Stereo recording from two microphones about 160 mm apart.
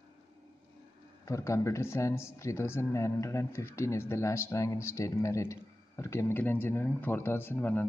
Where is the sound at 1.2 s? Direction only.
20° left (ahead or behind).